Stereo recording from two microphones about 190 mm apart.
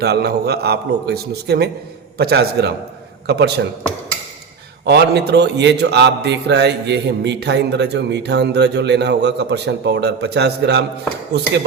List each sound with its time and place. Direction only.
0.0 s a man's voice: 55° right (ahead or behind)
4.9 s a man's voice: 60° right (ahead or behind)